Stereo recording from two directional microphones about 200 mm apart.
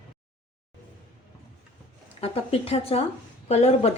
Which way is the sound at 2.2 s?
30° left (ahead or behind).